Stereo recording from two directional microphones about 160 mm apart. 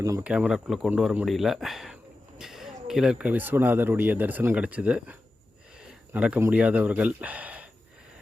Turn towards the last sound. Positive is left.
turn(degrees=-10)  # may be behind; listen again after turning